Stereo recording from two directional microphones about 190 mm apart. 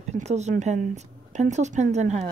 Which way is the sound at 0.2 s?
35° right (ahead or behind).